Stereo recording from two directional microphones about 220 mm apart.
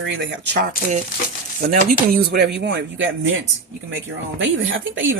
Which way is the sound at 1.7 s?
40° right (ahead or behind).